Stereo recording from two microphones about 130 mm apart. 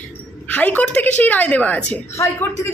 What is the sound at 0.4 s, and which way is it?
A woman's voice, 10° left (ahead or behind).